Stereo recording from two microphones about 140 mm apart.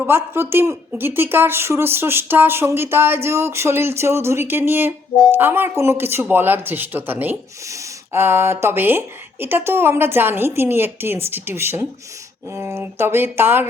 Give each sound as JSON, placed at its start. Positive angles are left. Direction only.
{"t": 0.0, "sound": "speech", "side_deg": -15}